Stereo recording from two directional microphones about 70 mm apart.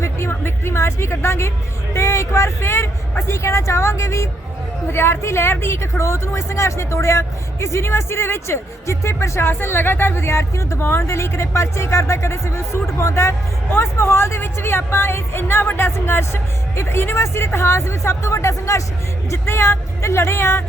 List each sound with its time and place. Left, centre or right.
0.0 s speech: left